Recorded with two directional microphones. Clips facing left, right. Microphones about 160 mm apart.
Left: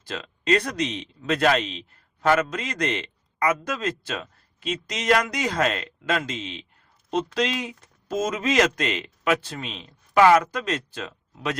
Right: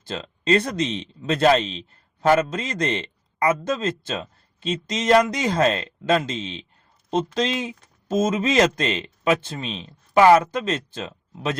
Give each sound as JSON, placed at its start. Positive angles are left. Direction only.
{"t": 0.0, "sound": "a man's voice", "side_deg": -30}